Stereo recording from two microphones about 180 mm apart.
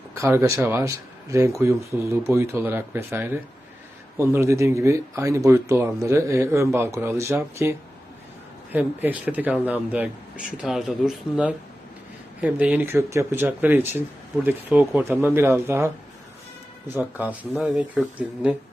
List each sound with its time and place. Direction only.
0.1 s speech: 15° right (ahead or behind)
16.9 s speech: 10° right (ahead or behind)